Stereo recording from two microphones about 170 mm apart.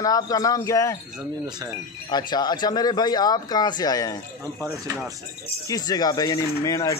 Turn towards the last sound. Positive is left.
turn(degrees=20)  # may be behind; listen again after turning